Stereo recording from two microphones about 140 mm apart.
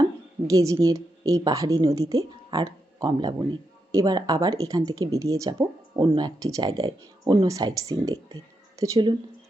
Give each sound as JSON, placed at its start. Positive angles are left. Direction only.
{"t": 0.4, "sound": "a woman's voice", "side_deg": -25}